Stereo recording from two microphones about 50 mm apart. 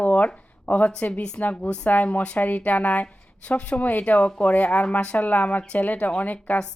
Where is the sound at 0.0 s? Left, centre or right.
Left.